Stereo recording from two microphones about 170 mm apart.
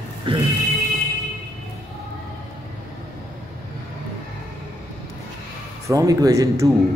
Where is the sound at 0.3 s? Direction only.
30° right (ahead or behind).